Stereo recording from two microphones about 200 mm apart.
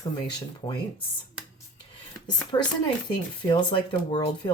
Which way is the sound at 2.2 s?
20° left (ahead or behind).